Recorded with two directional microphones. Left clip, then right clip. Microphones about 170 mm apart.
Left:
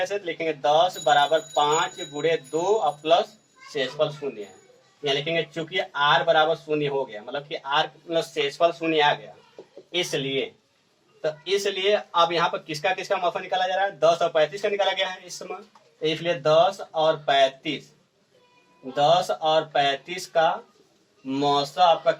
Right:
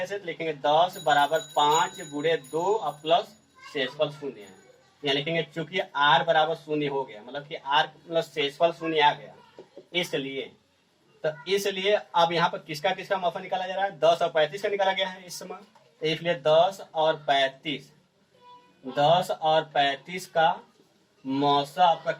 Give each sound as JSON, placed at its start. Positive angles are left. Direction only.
{"t": 0.1, "sound": "speech", "side_deg": 20}
{"t": 18.9, "sound": "speech", "side_deg": 20}